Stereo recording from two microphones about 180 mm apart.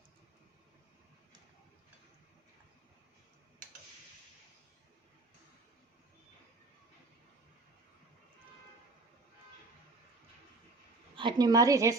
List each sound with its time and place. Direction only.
11.2 s a woman's voice: 25° right (ahead or behind)